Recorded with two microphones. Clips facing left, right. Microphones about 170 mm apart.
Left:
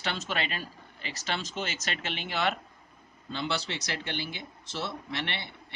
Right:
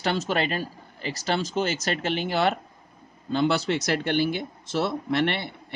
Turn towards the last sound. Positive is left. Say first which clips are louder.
# right 11 dB
turn(degrees=-50)  # may be behind; listen again after turning